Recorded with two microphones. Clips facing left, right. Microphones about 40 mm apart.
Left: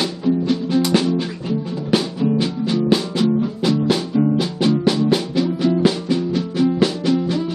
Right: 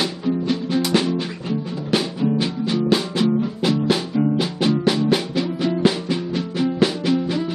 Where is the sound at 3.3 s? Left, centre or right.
Centre.